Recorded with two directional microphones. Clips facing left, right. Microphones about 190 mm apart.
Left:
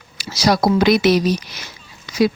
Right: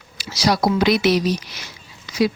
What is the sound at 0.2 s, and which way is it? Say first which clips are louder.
Speech: left 2 dB; 45° left (ahead or behind).